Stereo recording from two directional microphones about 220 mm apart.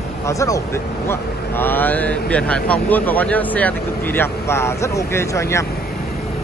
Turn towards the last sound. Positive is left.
turn(degrees=15)  # may be behind; listen again after turning